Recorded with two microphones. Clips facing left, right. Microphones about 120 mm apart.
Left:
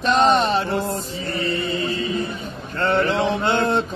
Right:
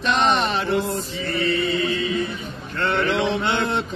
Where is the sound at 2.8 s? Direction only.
40° left (ahead or behind).